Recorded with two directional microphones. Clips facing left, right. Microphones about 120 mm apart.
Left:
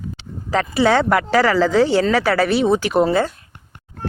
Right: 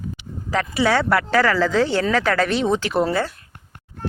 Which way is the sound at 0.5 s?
30° left (ahead or behind).